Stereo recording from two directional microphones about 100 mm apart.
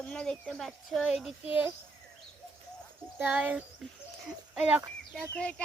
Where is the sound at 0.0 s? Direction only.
10° left (ahead or behind).